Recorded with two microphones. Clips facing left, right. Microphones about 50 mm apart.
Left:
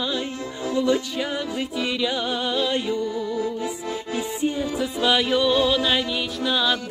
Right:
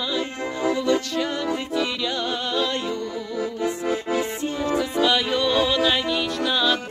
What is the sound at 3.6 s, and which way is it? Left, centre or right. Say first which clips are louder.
Music: right 4 dB; right.